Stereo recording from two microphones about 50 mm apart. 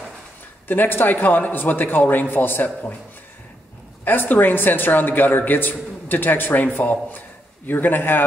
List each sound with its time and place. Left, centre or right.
0.7 s a man's voice: left
4.0 s a man's voice: left